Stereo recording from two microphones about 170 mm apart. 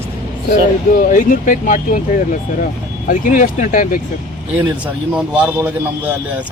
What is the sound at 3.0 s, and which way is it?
Speech, 50° left (ahead or behind).